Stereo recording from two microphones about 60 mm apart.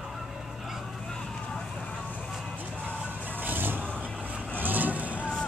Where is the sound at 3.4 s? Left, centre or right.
Right.